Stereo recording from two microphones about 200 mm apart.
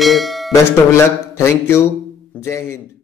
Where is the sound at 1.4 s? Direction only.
15° left (ahead or behind).